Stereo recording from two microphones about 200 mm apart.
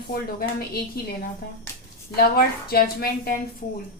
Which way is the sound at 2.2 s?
50° left (ahead or behind).